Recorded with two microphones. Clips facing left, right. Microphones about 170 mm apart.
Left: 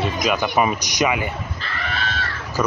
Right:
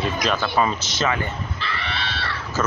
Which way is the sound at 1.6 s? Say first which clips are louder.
Left 1 dB; 45° left (ahead or behind).